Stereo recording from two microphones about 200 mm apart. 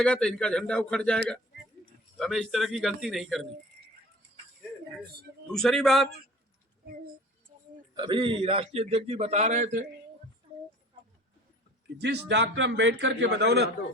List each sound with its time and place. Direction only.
0.0 s a man's voice: 5° left (ahead or behind)
5.5 s a man's voice: centre (ahead or behind)
7.9 s a man's voice: 25° right (ahead or behind)
10.5 s a sound: 25° right (ahead or behind)
11.9 s a man's voice: 55° right (ahead or behind)